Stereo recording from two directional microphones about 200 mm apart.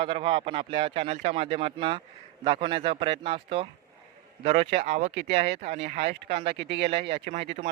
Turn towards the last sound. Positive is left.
turn(degrees=-35)  # may be behind; listen again after turning